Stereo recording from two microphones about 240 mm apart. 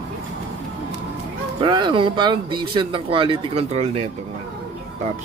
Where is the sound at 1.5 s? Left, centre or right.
Right.